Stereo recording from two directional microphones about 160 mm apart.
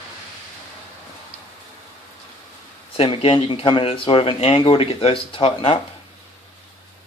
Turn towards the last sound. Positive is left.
turn(degrees=35)  # may be behind; listen again after turning